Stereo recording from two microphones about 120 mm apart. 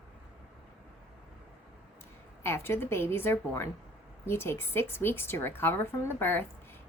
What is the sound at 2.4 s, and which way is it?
A woman's voice, 20° left (ahead or behind).